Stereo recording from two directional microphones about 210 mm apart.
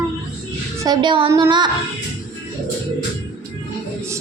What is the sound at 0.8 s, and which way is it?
Speech, 20° right (ahead or behind).